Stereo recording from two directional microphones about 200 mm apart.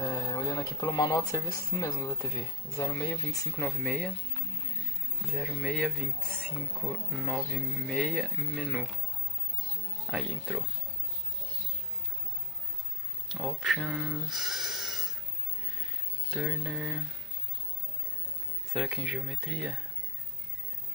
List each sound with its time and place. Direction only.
0.0 s speech: 15° left (ahead or behind)
5.3 s speech: centre (ahead or behind)
10.1 s speech: centre (ahead or behind)
13.3 s speech: centre (ahead or behind)
16.3 s speech: 5° right (ahead or behind)
18.7 s speech: centre (ahead or behind)